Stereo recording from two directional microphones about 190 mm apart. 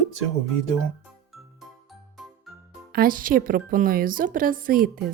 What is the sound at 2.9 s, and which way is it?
A woman's voice, 50° right (ahead or behind).